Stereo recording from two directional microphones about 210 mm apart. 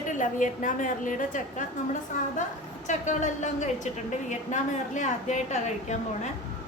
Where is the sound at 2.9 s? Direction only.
35° left (ahead or behind).